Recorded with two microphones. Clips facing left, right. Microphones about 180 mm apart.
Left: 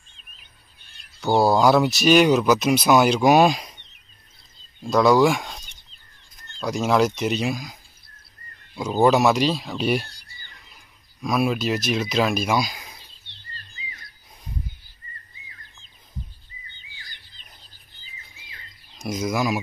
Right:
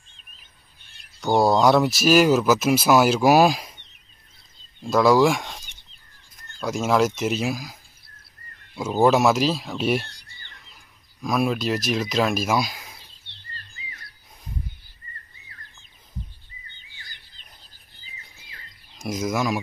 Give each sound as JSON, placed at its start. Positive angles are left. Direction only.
{"t": 1.2, "sound": "speech", "side_deg": 0}
{"t": 4.8, "sound": "speech", "side_deg": 0}
{"t": 10.0, "sound": "a sound", "side_deg": 5}
{"t": 13.3, "sound": "bird", "side_deg": -65}
{"t": 18.9, "sound": "speech", "side_deg": -5}